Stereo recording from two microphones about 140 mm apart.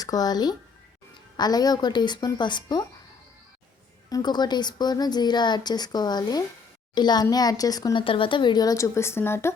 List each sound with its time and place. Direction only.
0.0 s a woman's voice: 25° left (ahead or behind)
4.1 s a woman's voice: 30° left (ahead or behind)
8.0 s a woman's voice: 40° left (ahead or behind); by 9.6 s 20° left (ahead or behind)